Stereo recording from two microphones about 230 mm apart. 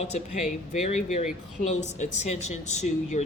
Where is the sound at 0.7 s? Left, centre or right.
Left.